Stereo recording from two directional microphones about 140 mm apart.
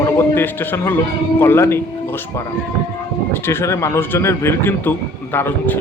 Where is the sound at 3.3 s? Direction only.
20° left (ahead or behind).